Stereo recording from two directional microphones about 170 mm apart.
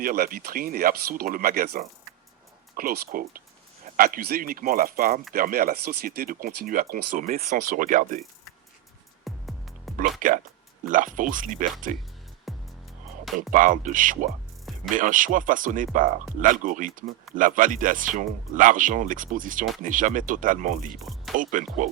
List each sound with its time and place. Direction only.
0.0 s speech: 55° right (ahead or behind)
9.2 s music: centre (ahead or behind)
10.2 s speech: 50° right (ahead or behind)
12.5 s music: centre (ahead or behind)
13.5 s speech: 50° right (ahead or behind)
20.9 s speech: centre (ahead or behind)
21.3 s speech: 50° right (ahead or behind)